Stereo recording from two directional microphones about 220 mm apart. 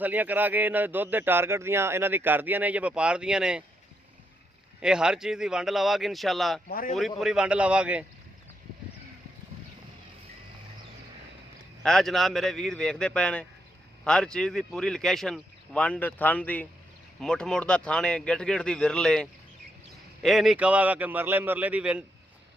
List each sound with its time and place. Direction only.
0.0 s speech: 5° right (ahead or behind)
4.8 s speech: 5° right (ahead or behind)
6.7 s a man's voice: 40° left (ahead or behind)
7.2 s speech: centre (ahead or behind)
11.8 s speech: centre (ahead or behind)